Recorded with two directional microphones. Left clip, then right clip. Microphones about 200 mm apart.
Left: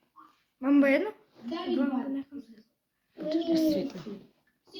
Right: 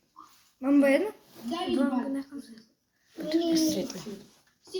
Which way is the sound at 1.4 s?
60° right (ahead or behind).